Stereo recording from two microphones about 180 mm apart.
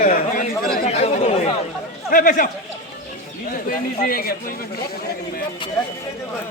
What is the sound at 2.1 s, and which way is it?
Speech, 50° left (ahead or behind).